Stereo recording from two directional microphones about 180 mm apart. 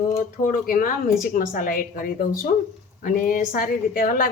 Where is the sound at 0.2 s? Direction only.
50° left (ahead or behind).